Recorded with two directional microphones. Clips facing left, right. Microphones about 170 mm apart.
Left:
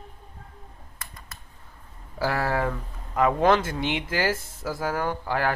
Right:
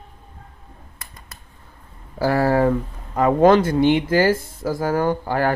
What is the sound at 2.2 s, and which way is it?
Speech, 30° right (ahead or behind).